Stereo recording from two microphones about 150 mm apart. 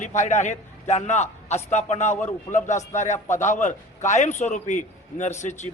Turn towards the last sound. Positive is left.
turn(degrees=50)  # may be behind; listen again after turning